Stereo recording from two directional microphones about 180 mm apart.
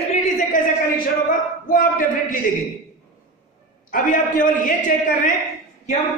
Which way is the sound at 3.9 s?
45° left (ahead or behind).